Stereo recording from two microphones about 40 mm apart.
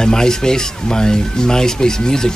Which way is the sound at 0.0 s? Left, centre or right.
Centre.